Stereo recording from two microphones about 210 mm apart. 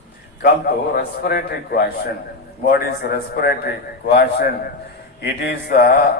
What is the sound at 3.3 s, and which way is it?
Speech, 50° left (ahead or behind).